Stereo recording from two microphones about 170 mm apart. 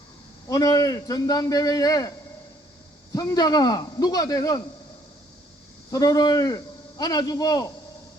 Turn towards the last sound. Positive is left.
turn(degrees=20)  # may be behind; listen again after turning